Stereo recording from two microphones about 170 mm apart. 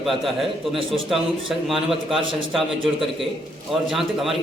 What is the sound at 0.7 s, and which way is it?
Speech, 30° right (ahead or behind).